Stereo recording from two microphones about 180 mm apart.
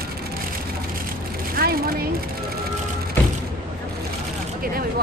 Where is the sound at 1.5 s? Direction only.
55° right (ahead or behind).